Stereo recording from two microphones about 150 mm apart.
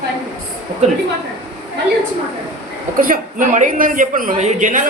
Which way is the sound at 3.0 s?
60° right (ahead or behind).